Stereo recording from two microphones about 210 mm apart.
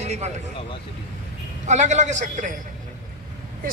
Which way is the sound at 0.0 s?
30° right (ahead or behind).